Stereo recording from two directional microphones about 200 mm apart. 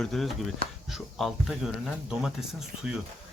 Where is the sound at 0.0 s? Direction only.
Centre (ahead or behind).